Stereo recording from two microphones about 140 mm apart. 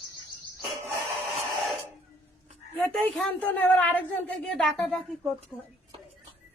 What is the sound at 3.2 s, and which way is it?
A woman's voice, 10° left (ahead or behind).